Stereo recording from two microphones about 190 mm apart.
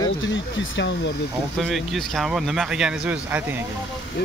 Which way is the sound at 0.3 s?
70° left (ahead or behind).